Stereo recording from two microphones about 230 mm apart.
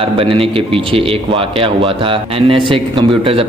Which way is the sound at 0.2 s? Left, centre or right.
Right.